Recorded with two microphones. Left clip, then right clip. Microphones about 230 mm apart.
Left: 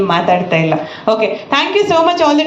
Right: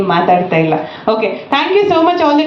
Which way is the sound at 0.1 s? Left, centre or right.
Left.